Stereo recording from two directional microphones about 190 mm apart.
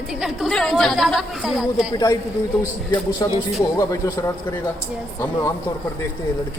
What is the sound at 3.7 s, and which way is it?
Speech, 15° left (ahead or behind).